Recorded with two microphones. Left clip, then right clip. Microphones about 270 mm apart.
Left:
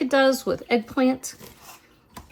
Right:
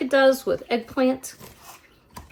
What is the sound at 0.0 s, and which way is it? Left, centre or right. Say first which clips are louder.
Speech: right 2 dB; left.